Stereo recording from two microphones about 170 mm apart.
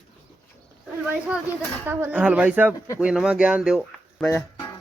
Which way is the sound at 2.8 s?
20° left (ahead or behind).